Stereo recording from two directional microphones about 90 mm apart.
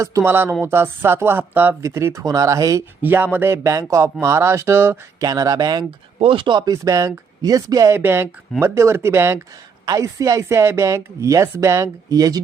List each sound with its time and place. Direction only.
0.0 s speech: 35° right (ahead or behind)
0.3 s speech: 25° right (ahead or behind)
2.2 s speech: 40° right (ahead or behind)
3.0 s speech: 20° right (ahead or behind)
5.2 s speech: 40° right (ahead or behind)
6.1 s speech: 80° right; by 7.9 s 40° right (ahead or behind)
7.9 s speech: 25° right (ahead or behind)
9.8 s speech: 40° right (ahead or behind)